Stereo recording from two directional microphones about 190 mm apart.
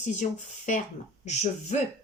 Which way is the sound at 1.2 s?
35° left (ahead or behind).